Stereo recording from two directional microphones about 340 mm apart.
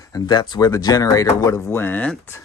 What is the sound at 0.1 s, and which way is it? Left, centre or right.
Speech, centre.